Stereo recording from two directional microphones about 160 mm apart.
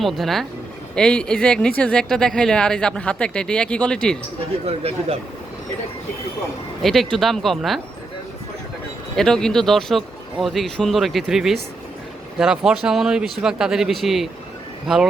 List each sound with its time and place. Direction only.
0.0 s speech: centre (ahead or behind)
4.6 s speech: 40° right (ahead or behind)
6.8 s speech: centre (ahead or behind)
9.1 s speech: 5° left (ahead or behind)